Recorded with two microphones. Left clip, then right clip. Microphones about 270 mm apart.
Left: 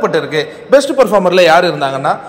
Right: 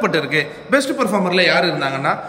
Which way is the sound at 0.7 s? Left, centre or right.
Centre.